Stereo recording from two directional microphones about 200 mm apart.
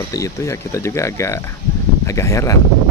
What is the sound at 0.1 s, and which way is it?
Speech, 15° left (ahead or behind).